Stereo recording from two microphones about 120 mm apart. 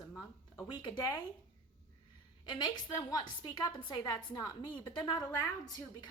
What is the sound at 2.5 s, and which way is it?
A woman's voice, 35° left (ahead or behind).